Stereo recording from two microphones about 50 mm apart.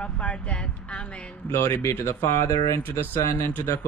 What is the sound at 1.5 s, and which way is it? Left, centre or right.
Speech, left.